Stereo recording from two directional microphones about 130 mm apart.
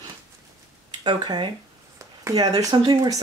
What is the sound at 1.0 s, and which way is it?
Speech, 35° right (ahead or behind).